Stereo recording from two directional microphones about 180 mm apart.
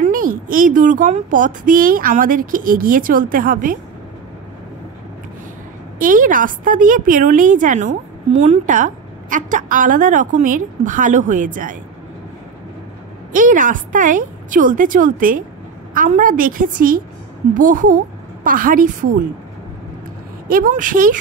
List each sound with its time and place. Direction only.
0.0 s a woman's voice: 50° right (ahead or behind)
5.9 s a woman's voice: 50° right (ahead or behind)
13.3 s a woman's voice: 45° right (ahead or behind)
20.4 s a woman's voice: 50° right (ahead or behind)